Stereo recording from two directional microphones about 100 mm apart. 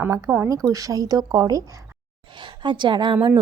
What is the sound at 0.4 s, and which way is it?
Speech, 35° right (ahead or behind).